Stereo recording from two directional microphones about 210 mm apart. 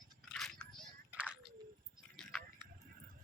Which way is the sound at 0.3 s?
5° left (ahead or behind).